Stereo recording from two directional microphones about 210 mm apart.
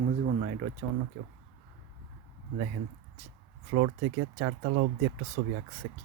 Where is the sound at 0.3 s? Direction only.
55° right (ahead or behind).